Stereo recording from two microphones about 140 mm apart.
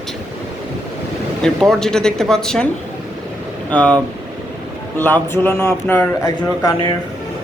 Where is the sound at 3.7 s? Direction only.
10° left (ahead or behind).